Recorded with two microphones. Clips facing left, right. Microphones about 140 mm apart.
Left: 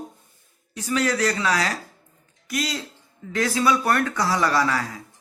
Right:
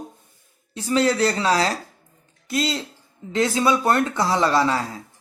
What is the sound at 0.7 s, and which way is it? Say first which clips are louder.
Speech: right 4 dB; 30° right (ahead or behind).